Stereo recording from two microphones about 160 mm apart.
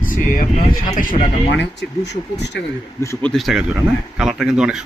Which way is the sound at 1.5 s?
90° left.